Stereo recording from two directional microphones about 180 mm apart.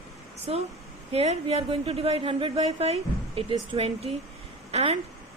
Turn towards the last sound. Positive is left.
turn(degrees=-35)  # may be behind; listen again after turning